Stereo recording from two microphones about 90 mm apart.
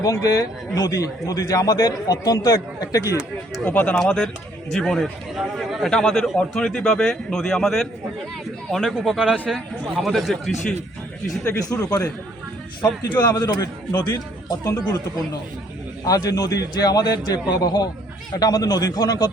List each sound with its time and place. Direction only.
0.0 s a man's voice: 40° left (ahead or behind)
3.6 s speech: 20° left (ahead or behind); by 10.8 s centre (ahead or behind)
11.5 s a man's voice: 40° left (ahead or behind)
12.8 s speech: 20° left (ahead or behind)
13.4 s a man's voice: 40° left (ahead or behind)
16.0 s a man's voice: 40° left (ahead or behind)